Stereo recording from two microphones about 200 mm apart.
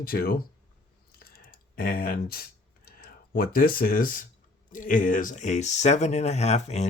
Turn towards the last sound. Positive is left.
turn(degrees=35)  # may be behind; listen again after turning